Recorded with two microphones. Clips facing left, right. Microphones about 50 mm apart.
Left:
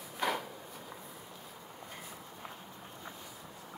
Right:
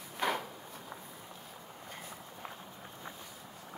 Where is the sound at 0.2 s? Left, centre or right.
Right.